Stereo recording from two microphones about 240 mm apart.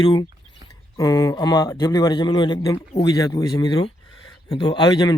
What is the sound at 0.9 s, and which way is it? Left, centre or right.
A man's voice, centre.